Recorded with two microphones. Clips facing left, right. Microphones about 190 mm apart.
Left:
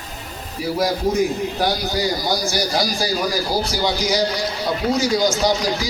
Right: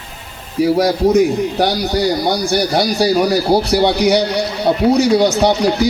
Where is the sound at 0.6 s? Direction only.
70° right (ahead or behind).